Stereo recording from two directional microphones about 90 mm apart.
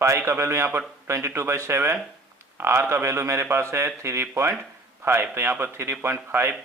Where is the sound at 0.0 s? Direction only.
30° right (ahead or behind).